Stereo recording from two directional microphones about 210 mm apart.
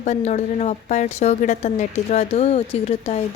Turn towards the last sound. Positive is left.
turn(degrees=30)  # may be behind; listen again after turning